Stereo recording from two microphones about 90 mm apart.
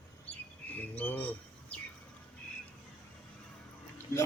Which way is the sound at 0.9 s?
20° left (ahead or behind).